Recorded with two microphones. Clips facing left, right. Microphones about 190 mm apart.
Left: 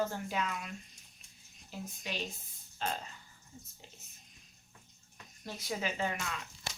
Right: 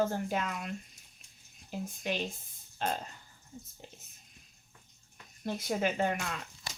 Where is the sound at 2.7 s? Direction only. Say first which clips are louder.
Right 3 dB; 45° right (ahead or behind).